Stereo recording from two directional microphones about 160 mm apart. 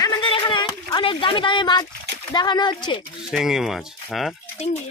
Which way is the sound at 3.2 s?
Centre (ahead or behind).